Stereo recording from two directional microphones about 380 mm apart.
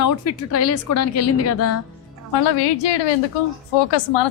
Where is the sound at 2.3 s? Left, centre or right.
Left.